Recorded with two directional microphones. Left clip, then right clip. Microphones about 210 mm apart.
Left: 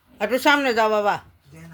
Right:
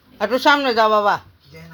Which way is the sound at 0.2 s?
10° left (ahead or behind).